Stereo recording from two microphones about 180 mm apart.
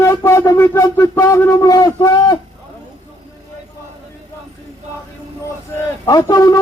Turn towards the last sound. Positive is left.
turn(degrees=20)  # may be behind; listen again after turning